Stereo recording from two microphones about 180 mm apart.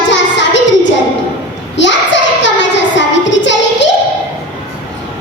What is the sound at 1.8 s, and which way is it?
Child singing, 85° left.